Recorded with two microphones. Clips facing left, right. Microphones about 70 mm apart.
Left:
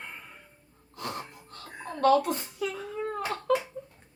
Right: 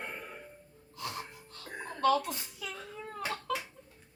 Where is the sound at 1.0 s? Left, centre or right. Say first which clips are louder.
Left 4 dB; left.